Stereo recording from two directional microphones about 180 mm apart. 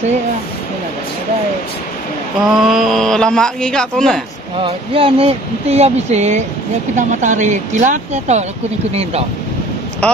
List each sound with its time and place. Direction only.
2.5 s speech: centre (ahead or behind)
4.6 s speech: 30° right (ahead or behind)
10.0 s speech: 5° left (ahead or behind)